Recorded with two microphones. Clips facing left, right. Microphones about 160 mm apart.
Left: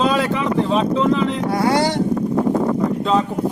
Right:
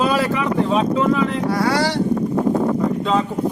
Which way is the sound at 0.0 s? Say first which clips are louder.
Even; 5° right (ahead or behind).